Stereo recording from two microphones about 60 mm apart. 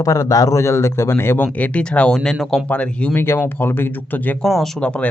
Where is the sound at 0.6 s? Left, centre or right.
Left.